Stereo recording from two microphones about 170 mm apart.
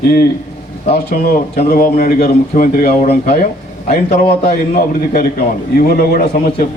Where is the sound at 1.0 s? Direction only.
60° left (ahead or behind).